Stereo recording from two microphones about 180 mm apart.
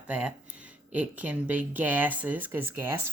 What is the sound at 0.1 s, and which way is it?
Speech, 5° right (ahead or behind).